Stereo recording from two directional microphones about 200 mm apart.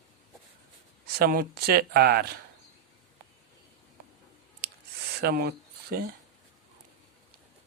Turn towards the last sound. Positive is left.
turn(degrees=-45)  # may be behind; listen again after turning